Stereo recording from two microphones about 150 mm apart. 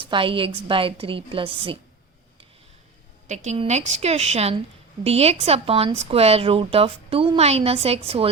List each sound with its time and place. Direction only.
0.0 s a woman's voice: 35° right (ahead or behind)
3.2 s a woman's voice: 50° right (ahead or behind)